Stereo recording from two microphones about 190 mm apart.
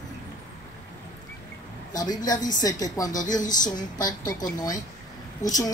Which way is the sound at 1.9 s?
20° left (ahead or behind).